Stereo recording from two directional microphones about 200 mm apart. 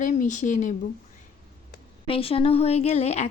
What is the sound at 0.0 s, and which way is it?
Speech, 40° left (ahead or behind).